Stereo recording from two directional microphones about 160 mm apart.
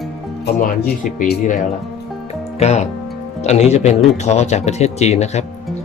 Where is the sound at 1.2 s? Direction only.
55° left (ahead or behind).